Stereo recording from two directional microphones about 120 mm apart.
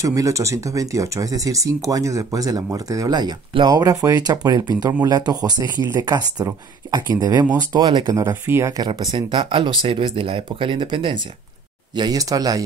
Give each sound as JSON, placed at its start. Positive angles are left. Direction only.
{"t": 0.0, "sound": "speech", "side_deg": -25}
{"t": 8.2, "sound": "speech", "side_deg": -20}
{"t": 8.7, "sound": "speech", "side_deg": -35}